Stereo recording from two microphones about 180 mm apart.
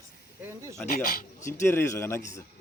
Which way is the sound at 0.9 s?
55° left (ahead or behind).